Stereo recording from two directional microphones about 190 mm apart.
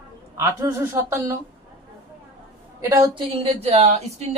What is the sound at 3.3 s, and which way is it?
Speech, 30° right (ahead or behind).